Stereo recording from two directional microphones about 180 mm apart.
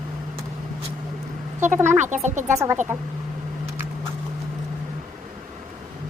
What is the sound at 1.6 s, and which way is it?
Speech, 15° right (ahead or behind).